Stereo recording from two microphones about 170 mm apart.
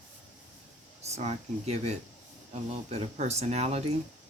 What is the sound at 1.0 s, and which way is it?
Speech, 40° right (ahead or behind).